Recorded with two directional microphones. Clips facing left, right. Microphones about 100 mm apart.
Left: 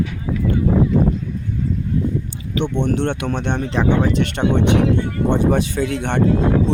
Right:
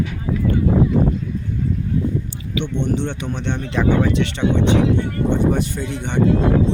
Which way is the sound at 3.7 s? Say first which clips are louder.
Right 1 dB; 25° left (ahead or behind).